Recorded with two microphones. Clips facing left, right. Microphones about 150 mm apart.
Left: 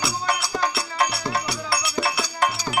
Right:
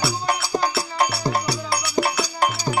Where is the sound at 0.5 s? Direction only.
35° right (ahead or behind).